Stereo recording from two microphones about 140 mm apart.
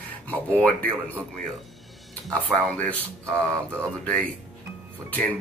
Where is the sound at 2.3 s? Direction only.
10° left (ahead or behind).